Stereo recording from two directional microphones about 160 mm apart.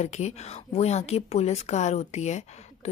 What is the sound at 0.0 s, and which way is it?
Speech, 45° left (ahead or behind).